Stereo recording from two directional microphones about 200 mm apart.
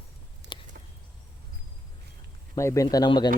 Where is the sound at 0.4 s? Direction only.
65° right (ahead or behind).